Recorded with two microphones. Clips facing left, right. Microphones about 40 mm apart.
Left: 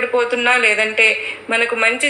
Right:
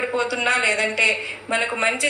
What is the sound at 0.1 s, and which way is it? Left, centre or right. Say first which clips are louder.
A woman's voice: left 7 dB; left.